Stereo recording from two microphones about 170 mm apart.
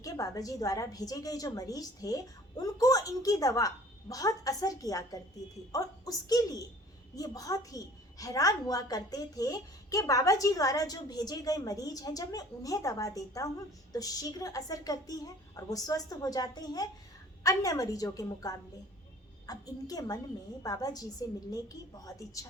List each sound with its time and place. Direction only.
0.0 s a woman's voice: 20° left (ahead or behind)